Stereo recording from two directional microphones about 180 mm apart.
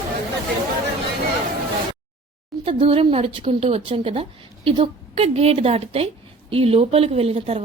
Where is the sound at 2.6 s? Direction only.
30° right (ahead or behind).